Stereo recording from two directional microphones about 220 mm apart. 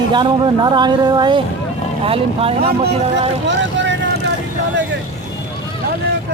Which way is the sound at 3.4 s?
55° right (ahead or behind).